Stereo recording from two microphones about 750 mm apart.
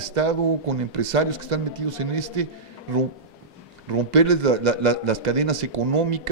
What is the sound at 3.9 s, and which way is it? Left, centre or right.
A man's voice, right.